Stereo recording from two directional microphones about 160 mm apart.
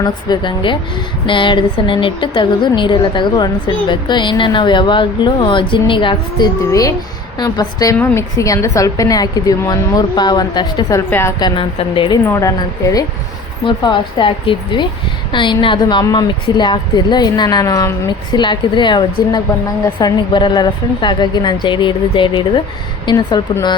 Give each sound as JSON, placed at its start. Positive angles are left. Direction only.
{"t": 0.0, "sound": "a woman's voice", "side_deg": 30}
{"t": 11.4, "sound": "speech", "side_deg": 30}
{"t": 12.2, "sound": "a woman's voice", "side_deg": 15}